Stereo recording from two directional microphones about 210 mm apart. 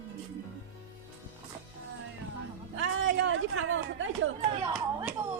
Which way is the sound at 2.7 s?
65° right (ahead or behind).